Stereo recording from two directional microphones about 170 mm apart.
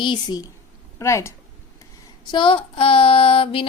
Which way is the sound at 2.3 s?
30° left (ahead or behind).